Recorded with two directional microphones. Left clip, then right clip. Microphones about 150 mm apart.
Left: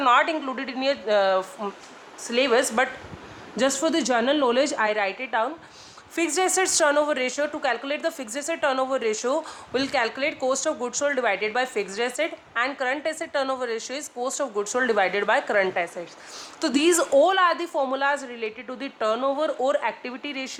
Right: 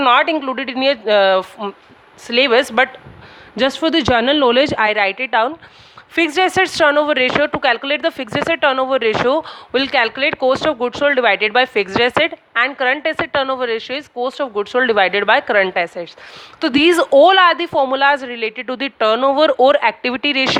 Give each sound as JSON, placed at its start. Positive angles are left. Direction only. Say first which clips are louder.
{"t": 0.0, "sound": "a woman's voice", "louder": "right 7 dB", "side_deg": -65}
{"t": 16.6, "sound": "a woman's voice", "louder": "right 8 dB", "side_deg": -50}